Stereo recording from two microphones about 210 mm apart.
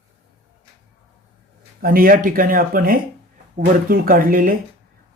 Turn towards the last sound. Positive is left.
turn(degrees=-40)  # may be behind; listen again after turning